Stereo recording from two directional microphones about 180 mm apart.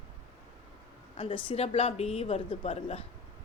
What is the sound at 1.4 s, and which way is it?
A woman's voice, 35° left (ahead or behind).